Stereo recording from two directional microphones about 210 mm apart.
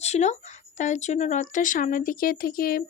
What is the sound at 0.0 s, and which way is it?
Speech, 30° left (ahead or behind).